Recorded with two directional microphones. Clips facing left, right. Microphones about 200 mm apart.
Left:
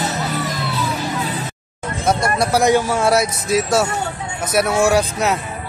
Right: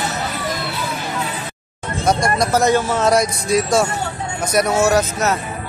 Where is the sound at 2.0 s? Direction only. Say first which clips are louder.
Right 1 dB; 5° left (ahead or behind).